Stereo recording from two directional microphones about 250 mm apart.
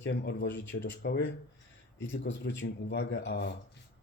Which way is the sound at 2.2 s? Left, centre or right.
Left.